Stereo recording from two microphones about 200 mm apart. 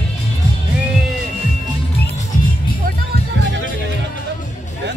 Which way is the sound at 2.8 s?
60° right (ahead or behind).